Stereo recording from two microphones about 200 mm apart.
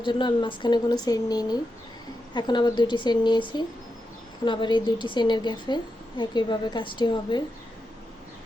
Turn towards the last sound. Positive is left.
turn(degrees=20)  # may be behind; listen again after turning